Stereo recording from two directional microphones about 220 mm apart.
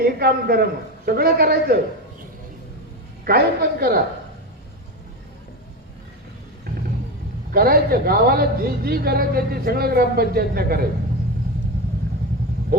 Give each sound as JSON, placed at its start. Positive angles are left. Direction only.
{"t": 0.0, "sound": "a man's voice", "side_deg": -45}
{"t": 3.2, "sound": "a man's voice", "side_deg": -45}
{"t": 6.7, "sound": "vehicle", "side_deg": -45}
{"t": 7.5, "sound": "a man's voice", "side_deg": -40}